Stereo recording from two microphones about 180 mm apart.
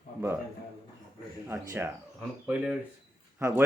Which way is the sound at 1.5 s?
15° right (ahead or behind).